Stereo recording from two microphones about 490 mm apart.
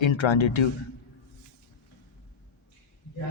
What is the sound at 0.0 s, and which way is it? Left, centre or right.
Speech, left.